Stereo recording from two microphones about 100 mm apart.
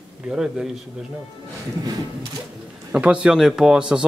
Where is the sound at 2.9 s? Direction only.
10° right (ahead or behind).